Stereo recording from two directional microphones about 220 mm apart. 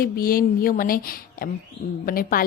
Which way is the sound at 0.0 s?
40° left (ahead or behind).